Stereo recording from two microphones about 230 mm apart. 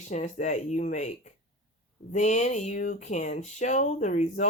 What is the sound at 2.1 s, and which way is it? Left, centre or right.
Speech, left.